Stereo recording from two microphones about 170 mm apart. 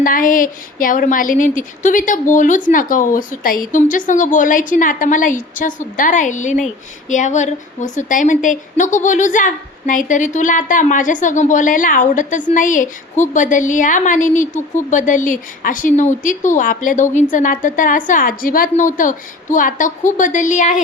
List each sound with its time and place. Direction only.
0.0 s a woman's voice: 55° left (ahead or behind)